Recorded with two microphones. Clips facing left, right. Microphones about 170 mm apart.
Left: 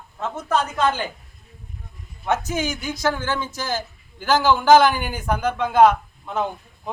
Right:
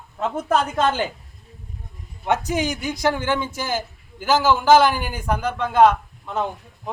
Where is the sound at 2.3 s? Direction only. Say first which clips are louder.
Right 1 dB; 15° right (ahead or behind).